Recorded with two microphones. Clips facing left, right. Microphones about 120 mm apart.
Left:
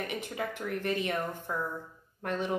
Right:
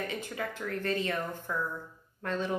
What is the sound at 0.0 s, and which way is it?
Speech, 20° left (ahead or behind).